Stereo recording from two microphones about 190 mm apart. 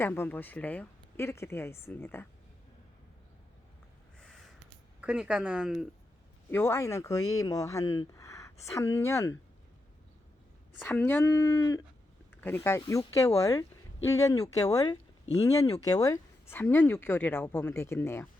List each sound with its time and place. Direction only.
0.0 s speech: 10° left (ahead or behind)
4.2 s crow: 5° left (ahead or behind)
4.9 s speech: 5° right (ahead or behind)
6.5 s speech: 15° left (ahead or behind)
10.8 s speech: 10° left (ahead or behind)